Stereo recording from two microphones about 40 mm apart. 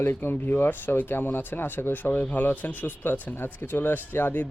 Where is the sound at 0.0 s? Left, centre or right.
Left.